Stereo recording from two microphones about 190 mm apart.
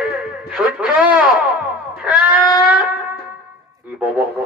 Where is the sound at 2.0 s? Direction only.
5° right (ahead or behind).